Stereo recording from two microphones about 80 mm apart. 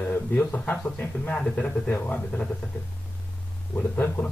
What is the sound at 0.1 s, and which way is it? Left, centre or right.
Speech, left.